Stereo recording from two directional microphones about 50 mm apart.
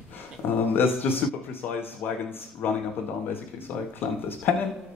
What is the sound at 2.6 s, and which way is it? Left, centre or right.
Speech, left.